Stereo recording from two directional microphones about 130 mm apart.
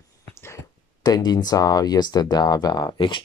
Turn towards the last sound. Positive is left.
turn(degrees=35)  # may be behind; listen again after turning